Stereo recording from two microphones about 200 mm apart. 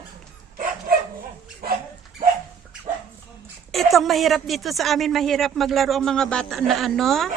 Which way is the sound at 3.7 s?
Centre (ahead or behind).